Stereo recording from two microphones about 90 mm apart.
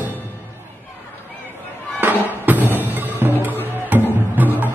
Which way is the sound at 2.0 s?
25° right (ahead or behind).